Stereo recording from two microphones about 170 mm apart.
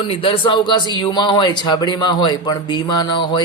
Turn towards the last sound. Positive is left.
turn(degrees=25)  # may be behind; listen again after turning